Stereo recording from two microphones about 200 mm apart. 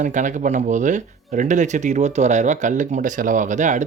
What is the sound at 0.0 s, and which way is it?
Speech, 40° right (ahead or behind).